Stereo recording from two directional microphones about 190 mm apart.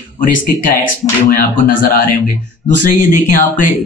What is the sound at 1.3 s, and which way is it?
Speech, 45° left (ahead or behind).